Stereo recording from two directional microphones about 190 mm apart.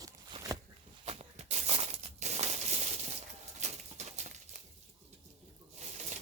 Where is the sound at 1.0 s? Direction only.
35° right (ahead or behind).